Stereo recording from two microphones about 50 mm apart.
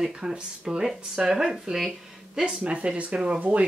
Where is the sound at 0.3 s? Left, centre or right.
Centre.